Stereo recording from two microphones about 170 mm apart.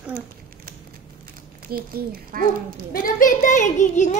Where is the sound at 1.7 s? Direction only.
60° right (ahead or behind).